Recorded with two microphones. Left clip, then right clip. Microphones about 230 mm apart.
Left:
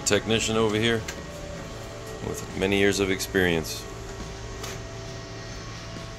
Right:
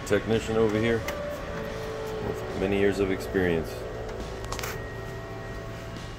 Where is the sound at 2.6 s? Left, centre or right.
Centre.